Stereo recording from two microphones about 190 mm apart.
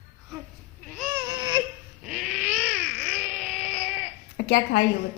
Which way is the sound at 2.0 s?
Centre (ahead or behind).